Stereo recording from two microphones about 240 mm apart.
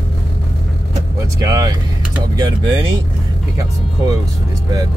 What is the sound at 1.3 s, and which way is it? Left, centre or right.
Speech, centre.